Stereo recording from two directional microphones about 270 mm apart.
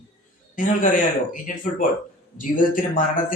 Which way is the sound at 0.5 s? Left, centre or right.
Left.